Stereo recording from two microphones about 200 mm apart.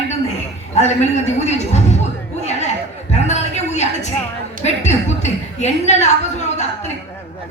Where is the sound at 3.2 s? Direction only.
35° left (ahead or behind).